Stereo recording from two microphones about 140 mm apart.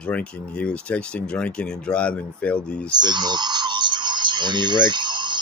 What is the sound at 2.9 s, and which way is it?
Speech, 30° right (ahead or behind).